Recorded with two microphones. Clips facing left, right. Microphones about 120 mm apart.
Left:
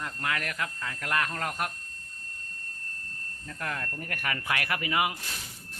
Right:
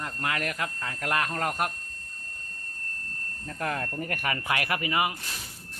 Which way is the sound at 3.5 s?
35° right (ahead or behind).